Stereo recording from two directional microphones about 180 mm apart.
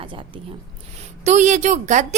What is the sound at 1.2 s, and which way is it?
Speech, 40° right (ahead or behind).